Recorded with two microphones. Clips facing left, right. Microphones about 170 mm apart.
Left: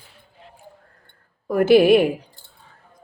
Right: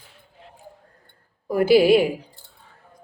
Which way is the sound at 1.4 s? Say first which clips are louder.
Left 2 dB; 10° right (ahead or behind).